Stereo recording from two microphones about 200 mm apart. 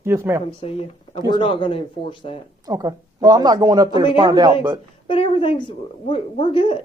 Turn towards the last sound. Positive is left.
turn(degrees=25)  # may be behind; listen again after turning